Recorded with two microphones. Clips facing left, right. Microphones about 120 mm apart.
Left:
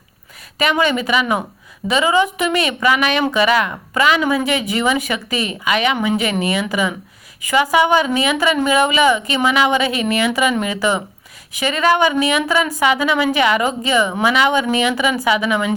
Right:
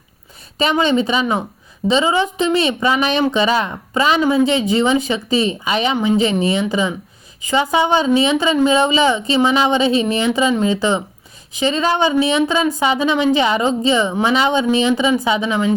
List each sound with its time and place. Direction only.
0.6 s a woman's voice: 25° right (ahead or behind)